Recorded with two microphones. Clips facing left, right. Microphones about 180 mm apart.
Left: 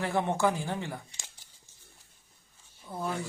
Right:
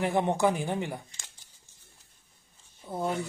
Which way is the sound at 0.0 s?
20° right (ahead or behind).